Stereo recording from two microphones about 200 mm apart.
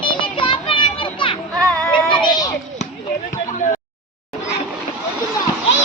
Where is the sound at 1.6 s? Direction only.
15° right (ahead or behind).